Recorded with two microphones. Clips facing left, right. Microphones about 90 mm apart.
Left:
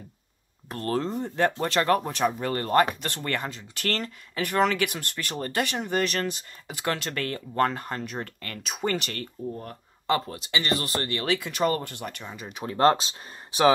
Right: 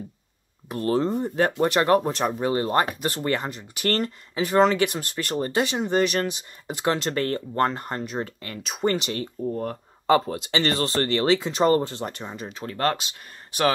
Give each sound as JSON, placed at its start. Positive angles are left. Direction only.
{"t": 0.7, "sound": "speech", "side_deg": -10}
{"t": 8.8, "sound": "speech", "side_deg": 0}
{"t": 9.2, "sound": "speech", "side_deg": -20}
{"t": 10.3, "sound": "speech", "side_deg": -30}
{"t": 12.5, "sound": "speech", "side_deg": 20}